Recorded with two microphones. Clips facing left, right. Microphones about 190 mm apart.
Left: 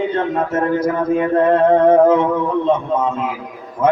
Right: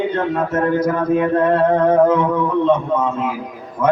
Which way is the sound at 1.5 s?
30° left (ahead or behind).